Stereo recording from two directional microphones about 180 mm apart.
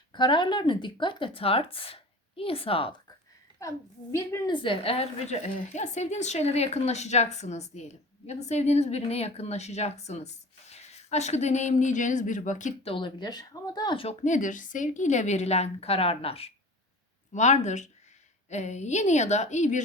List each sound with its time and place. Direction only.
0.1 s a woman's voice: 25° left (ahead or behind)
3.6 s a woman's voice: 15° left (ahead or behind)
4.5 s a woman's voice: 30° left (ahead or behind)
12.9 s a woman's voice: 25° left (ahead or behind); by 19.8 s 40° left (ahead or behind)